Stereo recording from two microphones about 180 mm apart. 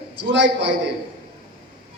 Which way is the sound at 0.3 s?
80° right.